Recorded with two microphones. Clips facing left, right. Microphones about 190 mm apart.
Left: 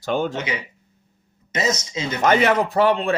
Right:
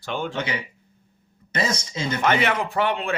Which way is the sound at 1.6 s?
30° right (ahead or behind).